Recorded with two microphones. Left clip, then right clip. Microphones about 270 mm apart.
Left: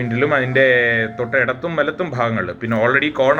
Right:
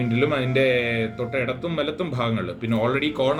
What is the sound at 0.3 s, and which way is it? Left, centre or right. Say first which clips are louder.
Speech: left 8 dB; centre.